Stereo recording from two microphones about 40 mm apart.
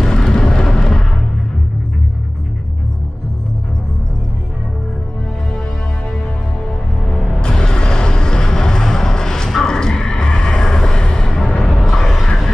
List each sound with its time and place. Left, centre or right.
0.0 s music: centre
7.4 s vehicle: centre
9.6 s music: centre
11.9 s a sound: centre